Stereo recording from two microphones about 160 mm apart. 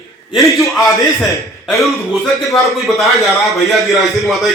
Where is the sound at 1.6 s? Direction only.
Centre (ahead or behind).